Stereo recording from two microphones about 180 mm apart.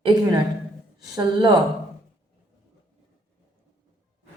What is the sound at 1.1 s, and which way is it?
Speech, 25° right (ahead or behind).